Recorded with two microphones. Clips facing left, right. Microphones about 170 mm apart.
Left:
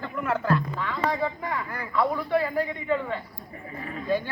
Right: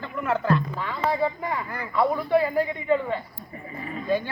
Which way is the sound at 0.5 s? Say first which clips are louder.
Right 1 dB; 10° right (ahead or behind).